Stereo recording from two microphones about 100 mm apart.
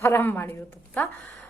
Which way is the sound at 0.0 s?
20° left (ahead or behind).